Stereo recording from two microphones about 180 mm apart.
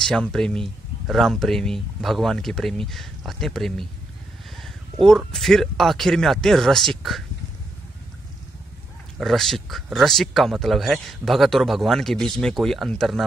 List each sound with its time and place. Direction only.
0.0 s speech: 5° left (ahead or behind)
5.0 s speech: centre (ahead or behind)
9.2 s speech: centre (ahead or behind)